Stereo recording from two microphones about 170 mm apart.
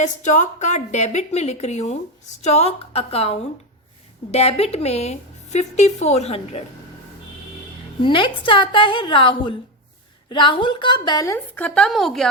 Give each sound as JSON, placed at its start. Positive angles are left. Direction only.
{"t": 0.0, "sound": "a woman's voice", "side_deg": 45}
{"t": 8.0, "sound": "a woman's voice", "side_deg": 30}